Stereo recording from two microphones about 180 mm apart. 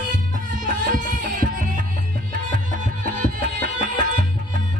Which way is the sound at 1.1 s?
45° right (ahead or behind).